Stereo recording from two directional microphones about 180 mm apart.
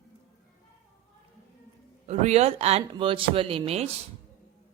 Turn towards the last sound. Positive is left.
turn(degrees=-35)  # may be behind; listen again after turning